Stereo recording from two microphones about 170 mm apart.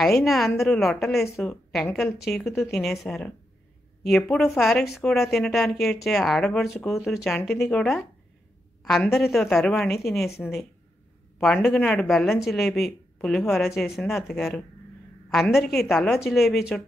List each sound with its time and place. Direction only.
0.0 s a woman's voice: centre (ahead or behind)
4.3 s speech: centre (ahead or behind)
11.4 s speech: 5° left (ahead or behind)